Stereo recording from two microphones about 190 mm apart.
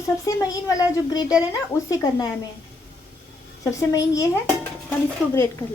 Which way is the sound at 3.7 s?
15° left (ahead or behind).